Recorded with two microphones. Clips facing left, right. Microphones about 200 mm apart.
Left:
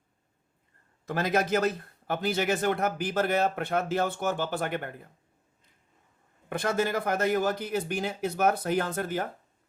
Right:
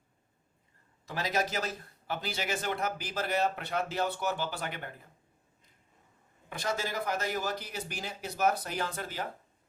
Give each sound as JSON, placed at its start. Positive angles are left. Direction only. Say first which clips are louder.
{"t": 1.0, "sound": "a man's voice", "louder": "left 5 dB", "side_deg": 55}
{"t": 6.5, "sound": "a man's voice", "louder": "left 7 dB", "side_deg": 55}